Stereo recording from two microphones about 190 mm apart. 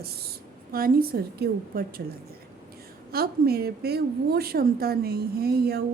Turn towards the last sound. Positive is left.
turn(degrees=-55)  # may be behind; listen again after turning